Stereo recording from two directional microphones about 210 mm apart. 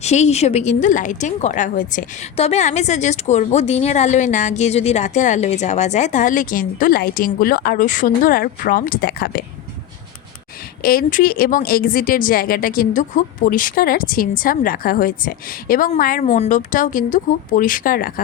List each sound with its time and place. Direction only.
0.0 s speech: 30° left (ahead or behind)
10.8 s speech: 45° left (ahead or behind)